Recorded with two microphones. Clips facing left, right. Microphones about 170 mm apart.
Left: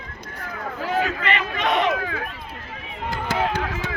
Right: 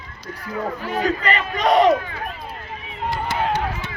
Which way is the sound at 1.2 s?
40° right (ahead or behind).